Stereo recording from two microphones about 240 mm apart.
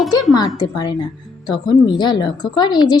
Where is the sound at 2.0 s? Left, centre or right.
Centre.